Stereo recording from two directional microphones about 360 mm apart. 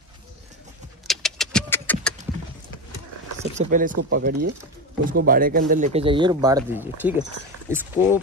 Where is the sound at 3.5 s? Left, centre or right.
Right.